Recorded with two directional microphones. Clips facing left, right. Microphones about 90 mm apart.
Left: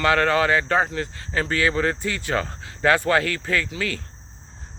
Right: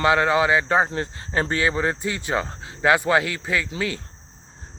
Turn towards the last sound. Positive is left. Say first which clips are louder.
# even
turn(degrees=-25)  # may be behind; listen again after turning